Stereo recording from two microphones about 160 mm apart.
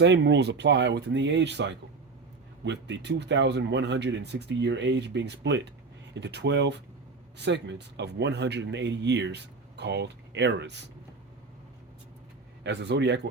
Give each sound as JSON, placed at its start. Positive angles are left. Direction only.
{"t": 0.0, "sound": "speech", "side_deg": -90}
{"t": 12.6, "sound": "speech", "side_deg": -90}